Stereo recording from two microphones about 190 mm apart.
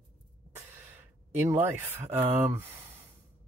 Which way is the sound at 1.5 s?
15° right (ahead or behind).